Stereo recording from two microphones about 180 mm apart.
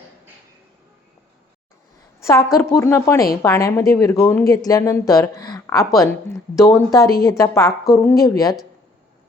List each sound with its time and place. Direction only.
2.6 s speech: 15° left (ahead or behind)